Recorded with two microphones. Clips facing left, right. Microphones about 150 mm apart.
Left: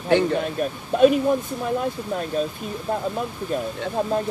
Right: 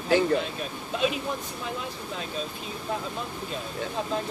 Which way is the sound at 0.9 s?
50° left (ahead or behind).